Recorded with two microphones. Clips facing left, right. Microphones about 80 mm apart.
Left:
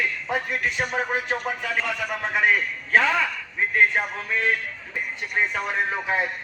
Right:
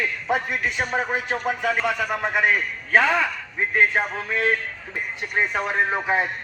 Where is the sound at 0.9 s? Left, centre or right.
Right.